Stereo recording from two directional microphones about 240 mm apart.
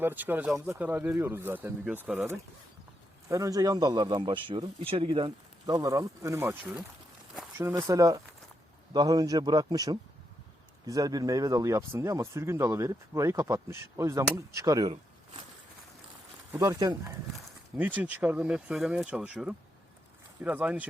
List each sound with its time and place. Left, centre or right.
0.0 s speech: centre
16.5 s speech: centre